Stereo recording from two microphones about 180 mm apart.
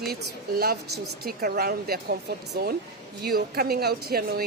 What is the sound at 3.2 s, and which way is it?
A woman's voice, 60° right (ahead or behind).